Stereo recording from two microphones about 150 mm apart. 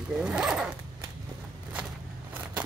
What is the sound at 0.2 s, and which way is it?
Speech, 5° right (ahead or behind).